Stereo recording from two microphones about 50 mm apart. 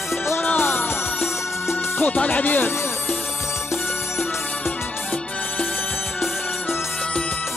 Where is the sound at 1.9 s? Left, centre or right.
Left.